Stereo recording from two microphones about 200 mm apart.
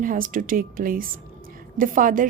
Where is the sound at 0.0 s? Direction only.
45° right (ahead or behind).